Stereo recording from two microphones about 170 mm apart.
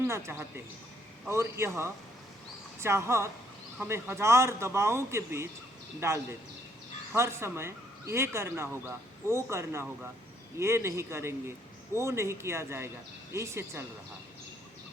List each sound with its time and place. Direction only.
0.0 s speech: 15° right (ahead or behind)